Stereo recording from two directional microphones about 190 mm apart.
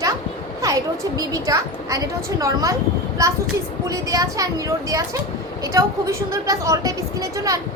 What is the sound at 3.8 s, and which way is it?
Speech, 15° right (ahead or behind).